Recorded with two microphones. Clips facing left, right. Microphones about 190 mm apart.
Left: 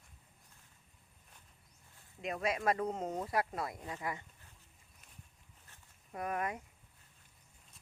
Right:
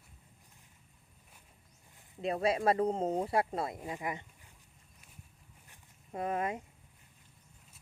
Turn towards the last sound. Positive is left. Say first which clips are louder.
# right 4 dB
turn(degrees=-25)  # may be behind; listen again after turning